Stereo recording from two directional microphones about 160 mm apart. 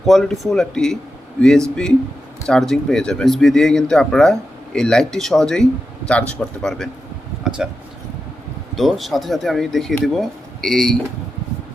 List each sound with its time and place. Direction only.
0.0 s speech: centre (ahead or behind)
7.4 s a sound: 5° right (ahead or behind)
8.7 s speech: centre (ahead or behind)